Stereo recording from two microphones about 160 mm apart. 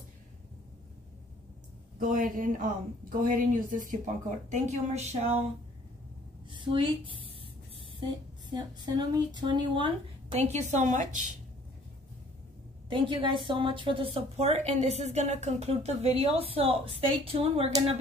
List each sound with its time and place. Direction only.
2.0 s speech: 55° right (ahead or behind)
6.5 s a woman's voice: 30° right (ahead or behind)
10.4 s speech: 45° right (ahead or behind)
12.9 s a woman's voice: 30° right (ahead or behind)